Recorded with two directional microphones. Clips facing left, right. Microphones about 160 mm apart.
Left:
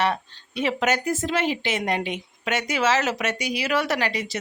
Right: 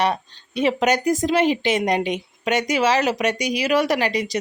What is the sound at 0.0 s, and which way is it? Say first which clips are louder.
Speech: right 2 dB; 20° right (ahead or behind).